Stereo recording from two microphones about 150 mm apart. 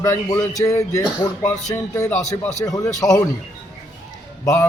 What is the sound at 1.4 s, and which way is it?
Speech, 50° left (ahead or behind).